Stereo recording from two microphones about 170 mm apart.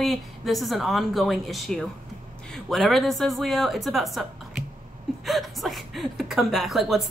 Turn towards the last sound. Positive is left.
turn(degrees=0)  # may be behind; listen again after turning